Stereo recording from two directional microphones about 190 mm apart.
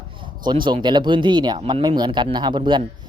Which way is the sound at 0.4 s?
25° right (ahead or behind).